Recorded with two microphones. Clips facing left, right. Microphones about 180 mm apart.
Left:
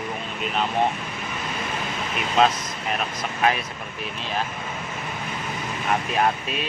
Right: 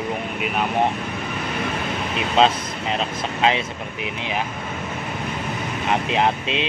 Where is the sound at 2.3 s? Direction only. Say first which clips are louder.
Right 2 dB; 25° right (ahead or behind).